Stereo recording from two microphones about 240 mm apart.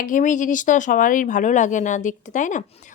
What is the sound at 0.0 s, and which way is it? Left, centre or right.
Speech, left.